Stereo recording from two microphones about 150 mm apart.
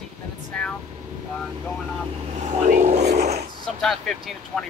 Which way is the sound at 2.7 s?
55° right (ahead or behind).